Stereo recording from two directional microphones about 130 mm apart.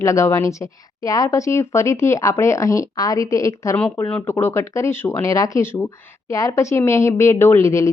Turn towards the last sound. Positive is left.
turn(degrees=20)  # may be behind; listen again after turning